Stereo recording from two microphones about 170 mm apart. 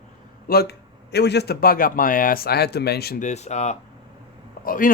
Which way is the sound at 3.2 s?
40° left (ahead or behind).